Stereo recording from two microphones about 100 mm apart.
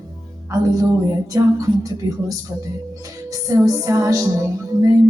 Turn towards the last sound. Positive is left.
turn(degrees=-35)  # may be behind; listen again after turning